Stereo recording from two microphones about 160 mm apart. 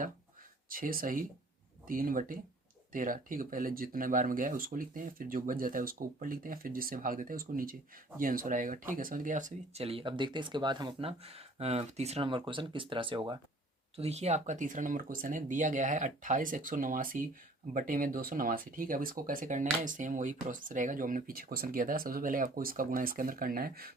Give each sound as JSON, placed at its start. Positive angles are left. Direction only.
{"t": 0.7, "sound": "speech", "side_deg": -65}
{"t": 9.8, "sound": "speech", "side_deg": -35}
{"t": 13.9, "sound": "speech", "side_deg": -40}